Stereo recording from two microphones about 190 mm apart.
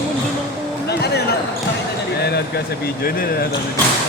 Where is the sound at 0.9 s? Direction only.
60° left (ahead or behind).